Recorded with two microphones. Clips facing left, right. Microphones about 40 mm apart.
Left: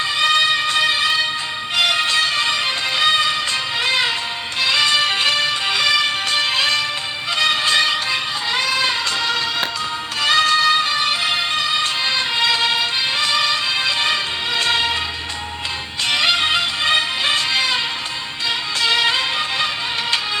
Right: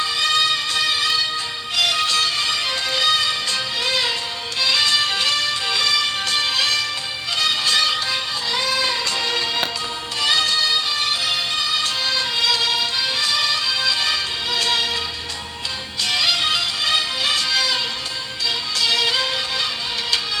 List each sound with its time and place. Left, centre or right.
0.2 s music: centre
10.2 s music: left
16.0 s music: left